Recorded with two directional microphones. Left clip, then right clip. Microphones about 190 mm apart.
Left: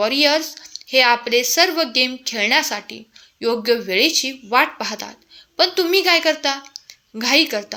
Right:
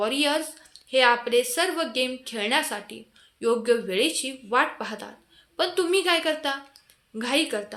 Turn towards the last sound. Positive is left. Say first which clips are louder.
# left 8 dB
turn(degrees=25)  # may be behind; listen again after turning